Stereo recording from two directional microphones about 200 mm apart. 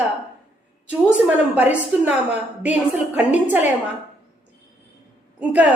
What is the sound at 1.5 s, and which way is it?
A woman's voice, 5° right (ahead or behind).